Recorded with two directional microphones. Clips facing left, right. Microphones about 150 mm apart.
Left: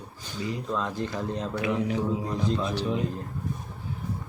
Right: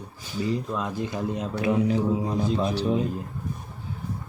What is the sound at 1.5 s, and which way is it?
Speech, 35° right (ahead or behind).